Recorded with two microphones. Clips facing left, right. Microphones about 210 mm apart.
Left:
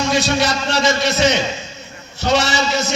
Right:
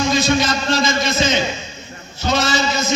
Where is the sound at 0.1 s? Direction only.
70° left (ahead or behind).